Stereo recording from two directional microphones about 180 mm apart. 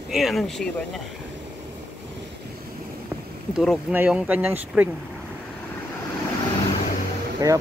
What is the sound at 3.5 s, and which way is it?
Speech, centre (ahead or behind).